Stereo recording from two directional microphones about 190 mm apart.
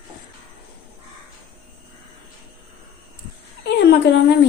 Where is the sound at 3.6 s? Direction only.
60° left (ahead or behind).